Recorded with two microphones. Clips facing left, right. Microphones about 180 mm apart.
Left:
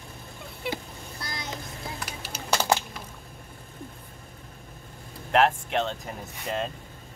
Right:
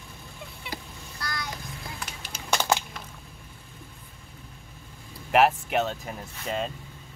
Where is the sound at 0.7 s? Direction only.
25° left (ahead or behind).